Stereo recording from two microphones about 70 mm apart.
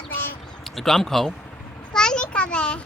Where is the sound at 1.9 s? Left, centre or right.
Centre.